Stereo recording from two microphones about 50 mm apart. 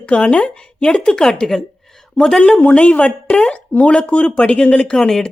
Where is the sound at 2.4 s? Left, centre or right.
Left.